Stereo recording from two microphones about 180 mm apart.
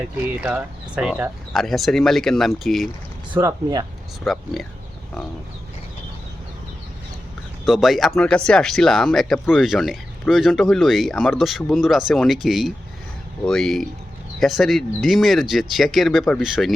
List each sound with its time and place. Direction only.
0.2 s speech: 5° right (ahead or behind)
3.3 s speech: 20° right (ahead or behind)
4.2 s speech: centre (ahead or behind)
7.6 s speech: centre (ahead or behind)